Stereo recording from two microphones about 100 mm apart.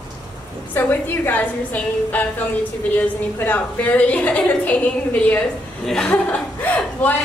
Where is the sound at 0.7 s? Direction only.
20° left (ahead or behind).